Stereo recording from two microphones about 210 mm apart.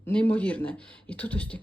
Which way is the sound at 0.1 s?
5° left (ahead or behind).